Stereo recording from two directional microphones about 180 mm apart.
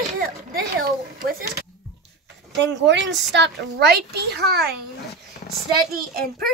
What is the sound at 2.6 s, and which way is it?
A woman's voice, 80° right.